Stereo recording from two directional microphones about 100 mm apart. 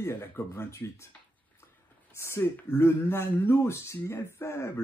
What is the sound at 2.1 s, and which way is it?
Speech, 25° left (ahead or behind).